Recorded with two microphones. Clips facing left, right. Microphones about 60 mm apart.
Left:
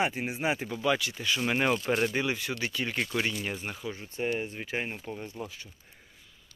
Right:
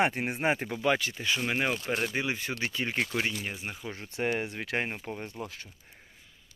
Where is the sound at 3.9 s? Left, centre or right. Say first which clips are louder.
Right 1 dB; right.